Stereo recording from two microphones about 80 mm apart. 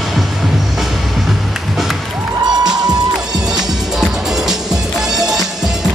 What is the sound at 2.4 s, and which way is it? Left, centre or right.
Music, right.